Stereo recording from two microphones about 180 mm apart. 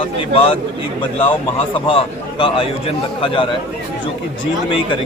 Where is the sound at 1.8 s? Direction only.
30° left (ahead or behind).